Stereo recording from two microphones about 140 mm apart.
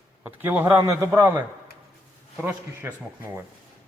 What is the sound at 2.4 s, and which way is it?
Speech, 10° right (ahead or behind).